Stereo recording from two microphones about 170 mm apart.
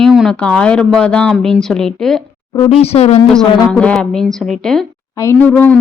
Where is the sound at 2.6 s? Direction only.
35° left (ahead or behind).